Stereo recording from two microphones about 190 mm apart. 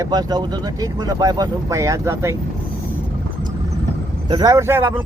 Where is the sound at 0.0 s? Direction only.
20° right (ahead or behind).